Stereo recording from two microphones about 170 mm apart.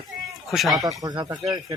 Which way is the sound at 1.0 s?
20° right (ahead or behind).